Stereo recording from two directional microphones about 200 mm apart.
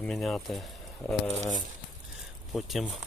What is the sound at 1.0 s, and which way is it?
Speech, 15° left (ahead or behind).